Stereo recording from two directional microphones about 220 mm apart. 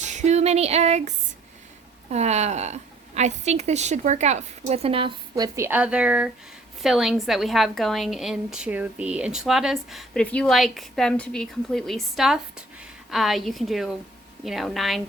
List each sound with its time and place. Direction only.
0.0 s a sound: 30° right (ahead or behind)
2.0 s a woman's voice: 30° right (ahead or behind)
5.5 s a woman's voice: 10° right (ahead or behind)